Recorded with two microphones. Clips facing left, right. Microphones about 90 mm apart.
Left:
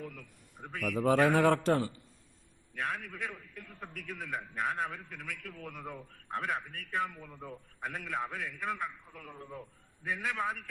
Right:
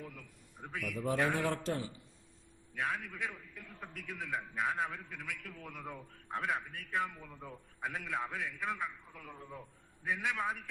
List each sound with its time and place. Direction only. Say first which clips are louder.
0.0 s a man's voice: left 4 dB; 5° right (ahead or behind)
0.9 s a man's voice: left 7 dB; 85° left; by 1.9 s 65° left (ahead or behind)
2.7 s a man's voice: left 1 dB; centre (ahead or behind)